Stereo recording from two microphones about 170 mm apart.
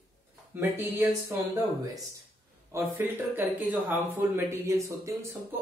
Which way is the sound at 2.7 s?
15° right (ahead or behind).